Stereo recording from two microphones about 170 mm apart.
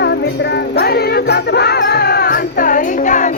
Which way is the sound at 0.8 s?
70° left (ahead or behind).